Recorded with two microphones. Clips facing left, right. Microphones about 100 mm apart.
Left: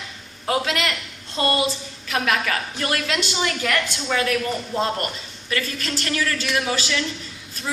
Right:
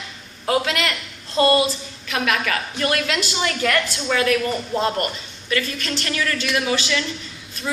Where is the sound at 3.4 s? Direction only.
15° left (ahead or behind).